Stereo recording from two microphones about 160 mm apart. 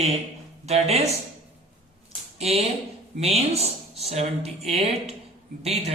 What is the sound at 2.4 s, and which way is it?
Speech, 40° right (ahead or behind).